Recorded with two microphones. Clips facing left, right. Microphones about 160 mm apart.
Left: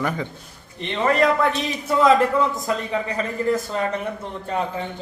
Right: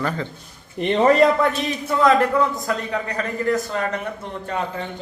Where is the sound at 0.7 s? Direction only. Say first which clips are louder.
Right 5 dB; 40° right (ahead or behind).